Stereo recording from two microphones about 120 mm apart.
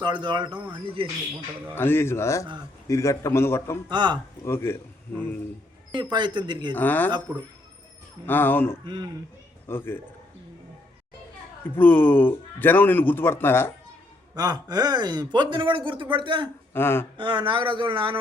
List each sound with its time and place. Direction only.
0.0 s speech: 40° right (ahead or behind)
1.7 s a man's voice: 20° left (ahead or behind)
3.8 s speech: 40° right (ahead or behind)
4.4 s a man's voice: 20° left (ahead or behind)
5.9 s speech: 40° right (ahead or behind)
6.7 s speech: 15° left (ahead or behind)
8.3 s a man's voice: 15° left (ahead or behind)
11.8 s speech: 15° left (ahead or behind)
14.3 s speech: 35° right (ahead or behind)
16.7 s a man's voice: 20° left (ahead or behind)
17.2 s speech: 40° right (ahead or behind)